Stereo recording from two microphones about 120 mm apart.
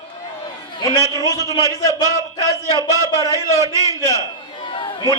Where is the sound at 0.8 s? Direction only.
35° left (ahead or behind).